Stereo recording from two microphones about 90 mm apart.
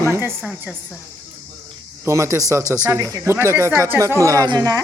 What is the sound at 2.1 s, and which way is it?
Speech, 30° right (ahead or behind).